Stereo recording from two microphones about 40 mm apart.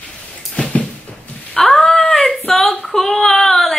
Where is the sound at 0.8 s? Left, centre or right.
Left.